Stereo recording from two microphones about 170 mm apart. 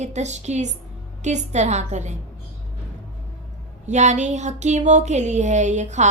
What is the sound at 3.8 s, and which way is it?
Speech, 45° right (ahead or behind).